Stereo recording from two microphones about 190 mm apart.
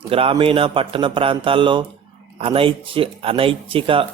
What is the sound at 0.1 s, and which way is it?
A man's voice, 30° right (ahead or behind).